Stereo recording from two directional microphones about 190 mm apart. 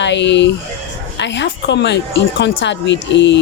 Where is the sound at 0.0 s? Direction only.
70° left (ahead or behind).